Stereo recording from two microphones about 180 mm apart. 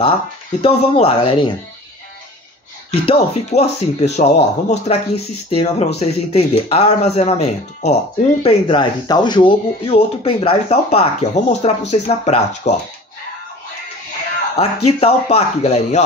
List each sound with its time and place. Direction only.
0.6 s speech: 35° left (ahead or behind)
2.9 s speech: 35° left (ahead or behind)
8.4 s speech: 30° left (ahead or behind)
14.6 s speech: 35° left (ahead or behind)